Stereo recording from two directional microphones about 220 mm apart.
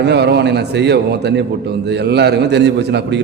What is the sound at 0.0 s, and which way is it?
A man's voice, 50° right (ahead or behind).